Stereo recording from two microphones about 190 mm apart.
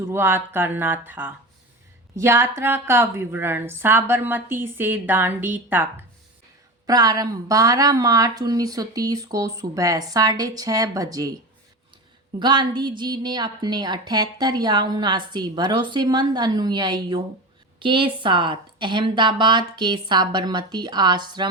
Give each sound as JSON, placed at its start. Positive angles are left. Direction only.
{"t": 0.1, "sound": "a woman's voice", "side_deg": -10}
{"t": 6.8, "sound": "a woman's voice", "side_deg": -20}
{"t": 12.4, "sound": "a woman's voice", "side_deg": -25}